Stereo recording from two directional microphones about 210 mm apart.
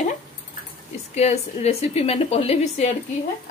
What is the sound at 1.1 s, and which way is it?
A woman's voice, 30° left (ahead or behind).